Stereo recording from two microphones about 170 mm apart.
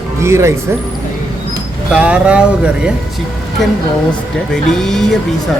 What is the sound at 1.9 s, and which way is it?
Speech, 5° right (ahead or behind).